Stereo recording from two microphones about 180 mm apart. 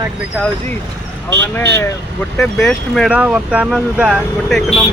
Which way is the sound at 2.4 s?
Centre (ahead or behind).